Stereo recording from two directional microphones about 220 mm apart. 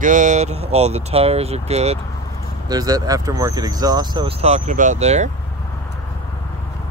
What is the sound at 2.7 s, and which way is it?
Speech, 15° right (ahead or behind).